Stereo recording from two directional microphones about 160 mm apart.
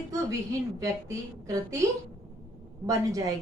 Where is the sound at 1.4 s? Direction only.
20° right (ahead or behind).